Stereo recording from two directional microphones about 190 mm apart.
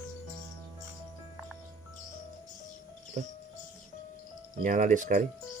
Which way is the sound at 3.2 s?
40° right (ahead or behind).